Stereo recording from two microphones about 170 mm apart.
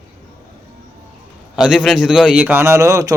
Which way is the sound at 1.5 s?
5° right (ahead or behind).